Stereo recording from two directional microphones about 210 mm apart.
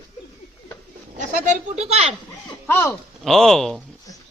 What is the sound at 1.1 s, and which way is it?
Bird, 35° right (ahead or behind).